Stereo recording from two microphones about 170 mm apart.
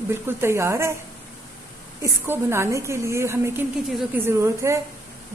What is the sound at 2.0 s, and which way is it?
A woman's voice, 15° right (ahead or behind).